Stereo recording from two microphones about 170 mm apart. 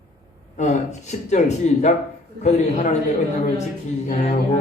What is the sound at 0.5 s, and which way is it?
A man's voice, 45° left (ahead or behind).